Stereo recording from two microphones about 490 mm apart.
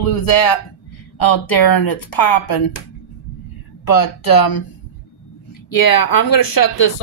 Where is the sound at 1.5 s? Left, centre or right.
Left.